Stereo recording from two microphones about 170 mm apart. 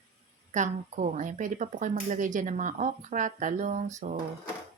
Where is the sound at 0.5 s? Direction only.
45° right (ahead or behind).